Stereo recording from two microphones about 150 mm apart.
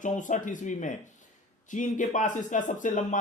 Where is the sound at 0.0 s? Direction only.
55° left (ahead or behind).